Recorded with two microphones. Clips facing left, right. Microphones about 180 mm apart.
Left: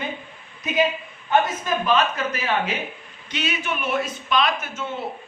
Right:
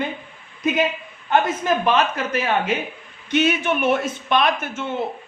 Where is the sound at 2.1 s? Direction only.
55° right (ahead or behind).